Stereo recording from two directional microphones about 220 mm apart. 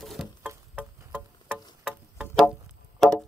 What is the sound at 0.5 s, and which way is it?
Insect, 10° right (ahead or behind).